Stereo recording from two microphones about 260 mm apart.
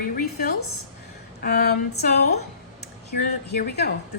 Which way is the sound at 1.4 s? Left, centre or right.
Left.